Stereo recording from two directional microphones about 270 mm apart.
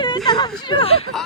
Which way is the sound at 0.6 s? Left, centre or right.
Centre.